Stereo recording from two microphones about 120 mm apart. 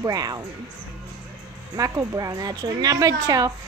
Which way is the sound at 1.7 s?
30° right (ahead or behind).